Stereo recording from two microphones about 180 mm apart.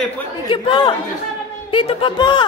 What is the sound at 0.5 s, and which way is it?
Speech, 25° left (ahead or behind).